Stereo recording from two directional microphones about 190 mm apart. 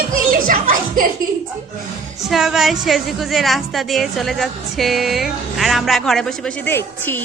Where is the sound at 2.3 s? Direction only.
Centre (ahead or behind).